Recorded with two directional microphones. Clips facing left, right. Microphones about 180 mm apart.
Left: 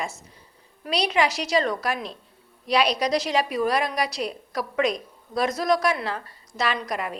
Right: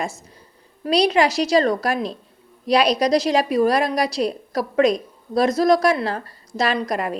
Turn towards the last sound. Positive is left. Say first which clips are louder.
# right 6 dB
turn(degrees=-40)  # may be behind; listen again after turning